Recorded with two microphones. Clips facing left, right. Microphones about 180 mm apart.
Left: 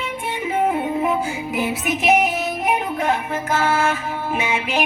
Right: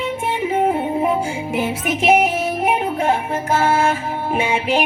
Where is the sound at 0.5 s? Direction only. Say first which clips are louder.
Right 1 dB; 30° right (ahead or behind).